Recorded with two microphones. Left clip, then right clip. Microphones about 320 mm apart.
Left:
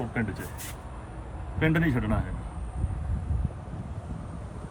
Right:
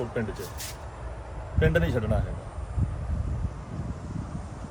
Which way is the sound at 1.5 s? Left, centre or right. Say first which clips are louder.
Right 1 dB; centre.